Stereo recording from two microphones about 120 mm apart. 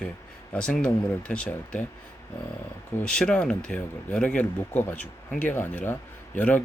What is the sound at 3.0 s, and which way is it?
Speech, 5° left (ahead or behind).